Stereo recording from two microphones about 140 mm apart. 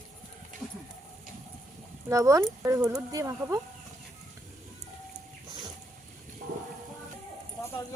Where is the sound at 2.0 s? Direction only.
20° right (ahead or behind).